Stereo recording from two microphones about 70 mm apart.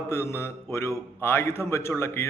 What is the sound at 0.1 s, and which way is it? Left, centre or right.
Speech, left.